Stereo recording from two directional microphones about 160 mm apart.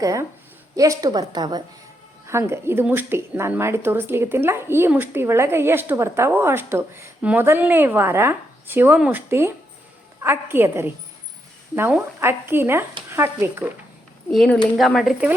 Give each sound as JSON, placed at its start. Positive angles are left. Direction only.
{"t": 0.0, "sound": "a woman's voice", "side_deg": -20}
{"t": 14.3, "sound": "speech", "side_deg": 5}